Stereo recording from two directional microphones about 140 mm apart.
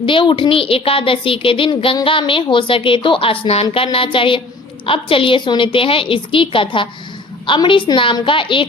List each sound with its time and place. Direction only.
0.0 s a woman's voice: 35° left (ahead or behind)